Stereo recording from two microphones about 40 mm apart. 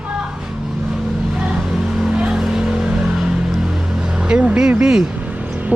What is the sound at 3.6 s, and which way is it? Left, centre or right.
Music, centre.